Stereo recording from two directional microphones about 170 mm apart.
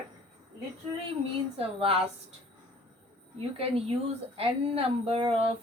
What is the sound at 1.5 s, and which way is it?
Speech, 35° right (ahead or behind).